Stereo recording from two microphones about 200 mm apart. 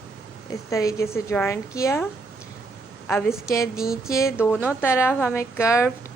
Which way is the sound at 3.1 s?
10° left (ahead or behind).